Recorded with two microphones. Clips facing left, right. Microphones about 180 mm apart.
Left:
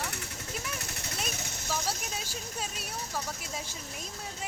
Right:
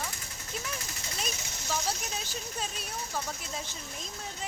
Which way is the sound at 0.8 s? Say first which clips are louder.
Left 3 dB; 60° left (ahead or behind).